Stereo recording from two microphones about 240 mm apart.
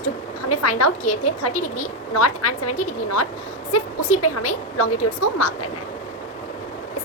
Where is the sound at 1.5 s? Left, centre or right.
Left.